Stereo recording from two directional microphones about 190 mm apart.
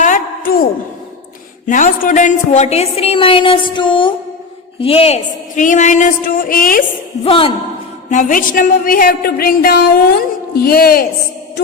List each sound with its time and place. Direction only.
0.0 s a sound: 45° left (ahead or behind)
1.6 s a woman's voice: 45° left (ahead or behind)
7.3 s a man's voice: 30° left (ahead or behind)
8.1 s a woman's voice: 45° left (ahead or behind)